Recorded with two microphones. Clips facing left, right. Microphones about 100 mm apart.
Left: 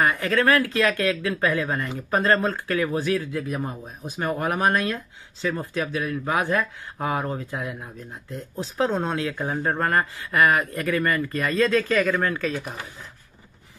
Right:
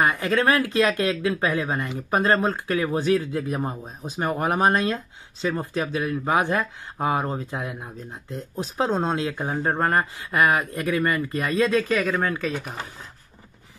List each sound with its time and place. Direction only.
0.0 s speech: 20° right (ahead or behind)
12.0 s speech: 5° right (ahead or behind)